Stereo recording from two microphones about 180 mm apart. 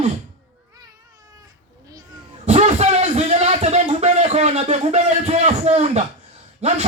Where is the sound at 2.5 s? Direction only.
35° right (ahead or behind).